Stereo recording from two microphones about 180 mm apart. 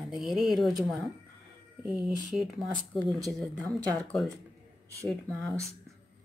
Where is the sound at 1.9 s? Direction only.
Centre (ahead or behind).